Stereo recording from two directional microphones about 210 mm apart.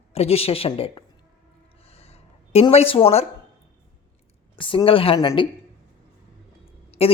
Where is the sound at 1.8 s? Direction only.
30° left (ahead or behind).